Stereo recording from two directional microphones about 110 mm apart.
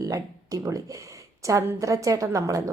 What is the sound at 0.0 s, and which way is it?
A woman's voice, 30° right (ahead or behind).